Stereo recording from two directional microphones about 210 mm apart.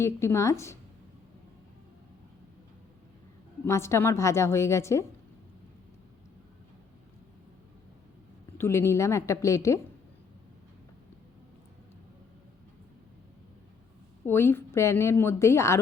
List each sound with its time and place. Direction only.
0.0 s a woman's voice: 15° left (ahead or behind)
3.6 s a woman's voice: 15° left (ahead or behind)
8.5 s a woman's voice: 10° left (ahead or behind)
14.3 s a woman's voice: 10° left (ahead or behind)